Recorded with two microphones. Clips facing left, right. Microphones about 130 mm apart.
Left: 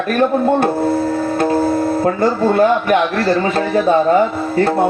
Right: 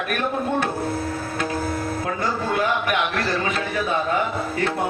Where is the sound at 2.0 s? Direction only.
50° left (ahead or behind).